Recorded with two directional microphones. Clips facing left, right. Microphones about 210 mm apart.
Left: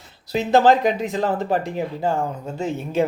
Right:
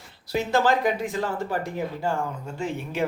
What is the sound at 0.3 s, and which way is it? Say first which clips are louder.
A man's voice: left 6 dB; 20° left (ahead or behind).